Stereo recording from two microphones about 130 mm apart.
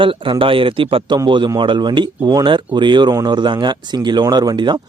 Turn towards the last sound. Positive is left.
turn(degrees=-35)  # may be behind; listen again after turning